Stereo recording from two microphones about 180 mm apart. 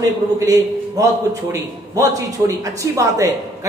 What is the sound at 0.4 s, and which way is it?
A man's voice, 20° right (ahead or behind).